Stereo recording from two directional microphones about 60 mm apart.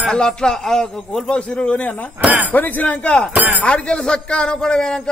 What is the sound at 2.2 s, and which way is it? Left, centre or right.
Speech, right.